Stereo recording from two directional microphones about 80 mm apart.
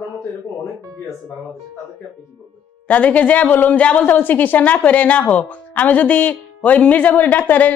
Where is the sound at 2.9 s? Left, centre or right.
Centre.